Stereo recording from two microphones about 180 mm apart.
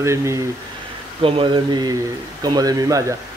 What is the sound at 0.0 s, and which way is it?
Speech, 15° right (ahead or behind).